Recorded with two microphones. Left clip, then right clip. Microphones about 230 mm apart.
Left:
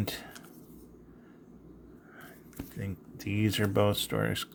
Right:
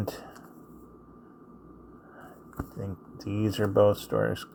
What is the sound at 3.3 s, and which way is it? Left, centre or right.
Speech, left.